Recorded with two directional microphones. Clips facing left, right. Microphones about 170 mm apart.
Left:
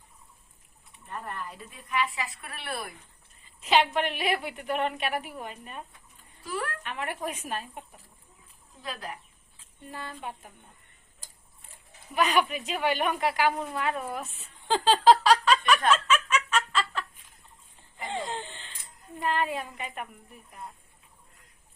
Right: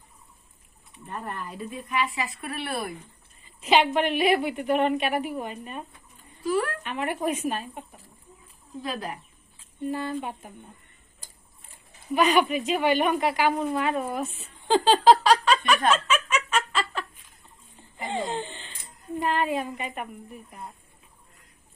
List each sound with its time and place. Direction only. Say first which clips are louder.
1.3 s a woman's voice: right 5 dB; 15° right (ahead or behind)
3.6 s a woman's voice: right 3 dB; centre (ahead or behind)
6.8 s a woman's voice: right 6 dB; 5° right (ahead or behind)
8.8 s speech: right 5 dB; 25° right (ahead or behind)
10.2 s a woman's voice: right 6 dB; 15° right (ahead or behind)
12.1 s a woman's voice: right 4 dB; centre (ahead or behind)
15.9 s snicker: right 1 dB; 5° right (ahead or behind)
17.9 s a sound: right 4 dB; 5° right (ahead or behind)
19.2 s a woman's voice: right 3 dB; 5° right (ahead or behind)